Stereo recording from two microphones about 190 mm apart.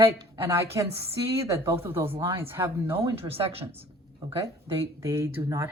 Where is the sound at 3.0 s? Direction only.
30° right (ahead or behind).